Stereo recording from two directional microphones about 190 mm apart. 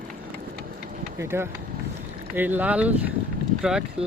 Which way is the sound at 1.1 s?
15° right (ahead or behind).